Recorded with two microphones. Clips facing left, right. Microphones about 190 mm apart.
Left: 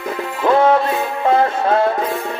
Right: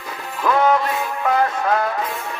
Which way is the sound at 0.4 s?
30° left (ahead or behind).